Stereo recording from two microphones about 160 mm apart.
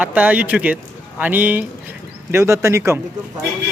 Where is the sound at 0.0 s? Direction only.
10° right (ahead or behind).